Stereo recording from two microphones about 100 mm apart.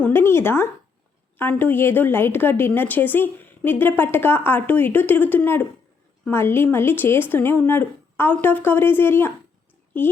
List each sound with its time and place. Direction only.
0.0 s a woman's voice: 20° left (ahead or behind)